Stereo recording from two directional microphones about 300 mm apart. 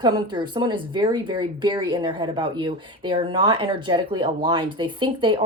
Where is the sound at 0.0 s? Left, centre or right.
Centre.